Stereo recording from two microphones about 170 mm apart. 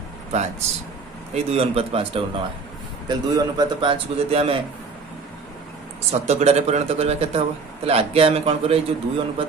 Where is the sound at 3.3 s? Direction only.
25° right (ahead or behind).